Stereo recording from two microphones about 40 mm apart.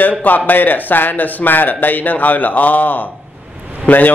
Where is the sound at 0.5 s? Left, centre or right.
Left.